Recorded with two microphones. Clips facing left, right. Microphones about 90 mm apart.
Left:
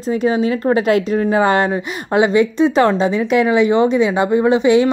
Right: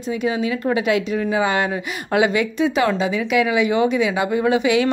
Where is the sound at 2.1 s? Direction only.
30° left (ahead or behind).